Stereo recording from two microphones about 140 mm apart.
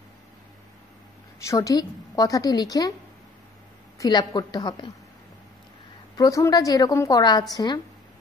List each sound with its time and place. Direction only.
1.4 s a woman's voice: 20° left (ahead or behind)
4.0 s a woman's voice: 30° left (ahead or behind)
6.1 s a woman's voice: 25° left (ahead or behind)